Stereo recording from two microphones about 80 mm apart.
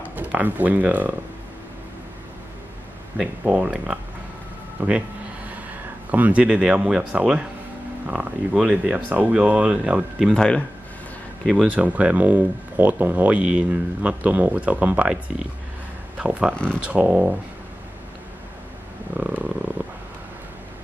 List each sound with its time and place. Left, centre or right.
0.1 s speech: centre
3.4 s speech: centre
6.0 s speech: centre
8.5 s speech: centre
8.9 s speech: centre
10.3 s speech: centre
11.6 s speech: centre
19.1 s purr: centre